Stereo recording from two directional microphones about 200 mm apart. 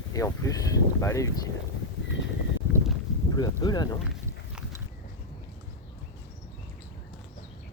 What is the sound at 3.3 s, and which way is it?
Speech, 20° left (ahead or behind).